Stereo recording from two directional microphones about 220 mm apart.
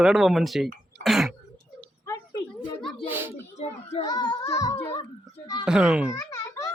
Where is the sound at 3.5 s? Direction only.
30° left (ahead or behind).